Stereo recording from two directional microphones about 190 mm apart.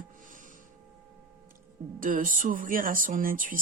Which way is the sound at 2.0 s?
45° right (ahead or behind).